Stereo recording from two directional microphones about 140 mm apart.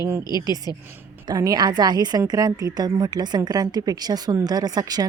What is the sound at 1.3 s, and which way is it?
A woman's voice, 25° right (ahead or behind).